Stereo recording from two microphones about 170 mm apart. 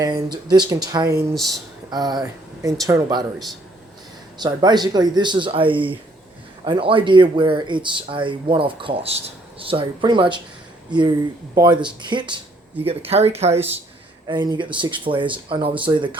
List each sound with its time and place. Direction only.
0.0 s speech: 25° right (ahead or behind)
1.3 s speech: centre (ahead or behind)
1.9 s speech: 25° right (ahead or behind)
4.4 s speech: 25° right (ahead or behind)
11.5 s speech: 25° right (ahead or behind)
14.3 s speech: 25° right (ahead or behind)